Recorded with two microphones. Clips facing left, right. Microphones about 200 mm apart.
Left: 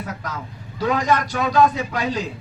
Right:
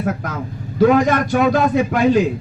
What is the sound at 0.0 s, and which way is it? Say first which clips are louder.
Vehicle: right 8 dB; 50° right (ahead or behind).